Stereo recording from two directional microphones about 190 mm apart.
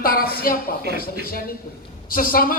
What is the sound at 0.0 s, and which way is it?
A woman's voice, 50° left (ahead or behind).